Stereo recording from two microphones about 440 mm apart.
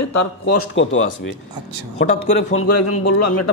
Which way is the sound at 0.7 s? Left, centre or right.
Left.